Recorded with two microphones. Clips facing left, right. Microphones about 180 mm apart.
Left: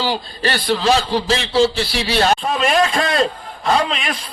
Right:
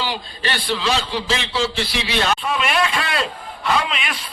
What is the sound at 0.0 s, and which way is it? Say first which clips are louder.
A man's voice: left 5 dB; 40° left (ahead or behind).